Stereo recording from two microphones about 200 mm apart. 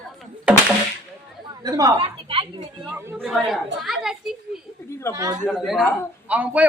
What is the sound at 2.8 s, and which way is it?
Speech, 10° right (ahead or behind).